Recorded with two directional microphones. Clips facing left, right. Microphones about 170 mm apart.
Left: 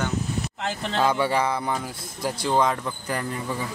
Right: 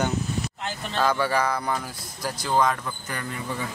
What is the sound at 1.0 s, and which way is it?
Speech, 20° left (ahead or behind).